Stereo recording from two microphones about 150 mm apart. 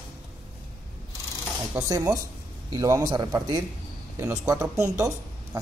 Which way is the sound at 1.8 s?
20° right (ahead or behind).